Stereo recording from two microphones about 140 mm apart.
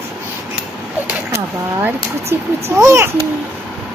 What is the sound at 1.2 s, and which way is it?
A child's voice, 20° right (ahead or behind).